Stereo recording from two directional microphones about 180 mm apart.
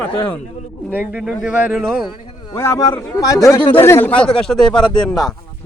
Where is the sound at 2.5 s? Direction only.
15° left (ahead or behind).